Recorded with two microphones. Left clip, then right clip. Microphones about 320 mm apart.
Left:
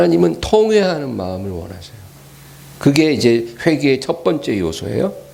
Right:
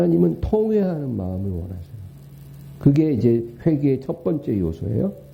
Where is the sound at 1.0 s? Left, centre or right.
Centre.